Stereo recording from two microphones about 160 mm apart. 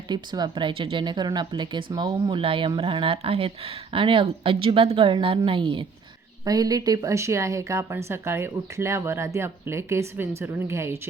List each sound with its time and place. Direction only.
0.1 s a woman's voice: 25° right (ahead or behind)